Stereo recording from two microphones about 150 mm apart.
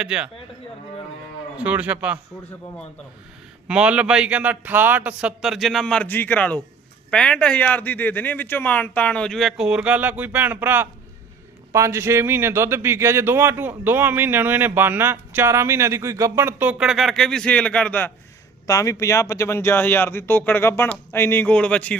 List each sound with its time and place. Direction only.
0.0 s speech: 5° right (ahead or behind)
1.5 s speech: 10° right (ahead or behind)
3.7 s a man's voice: 5° right (ahead or behind); by 18.1 s 10° left (ahead or behind)
18.7 s speech: 20° left (ahead or behind)